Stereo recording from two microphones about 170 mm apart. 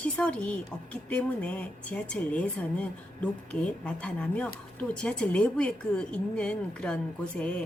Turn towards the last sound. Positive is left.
turn(degrees=5)  # may be behind; listen again after turning